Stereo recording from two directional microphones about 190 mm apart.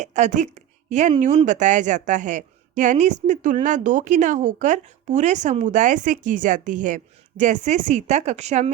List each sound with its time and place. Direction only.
0.0 s speech: 40° right (ahead or behind)